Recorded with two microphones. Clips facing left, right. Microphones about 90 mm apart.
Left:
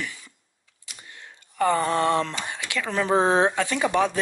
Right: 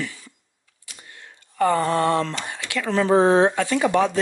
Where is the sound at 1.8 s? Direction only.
20° left (ahead or behind).